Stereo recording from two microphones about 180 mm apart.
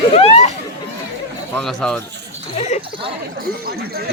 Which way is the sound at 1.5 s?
5° left (ahead or behind).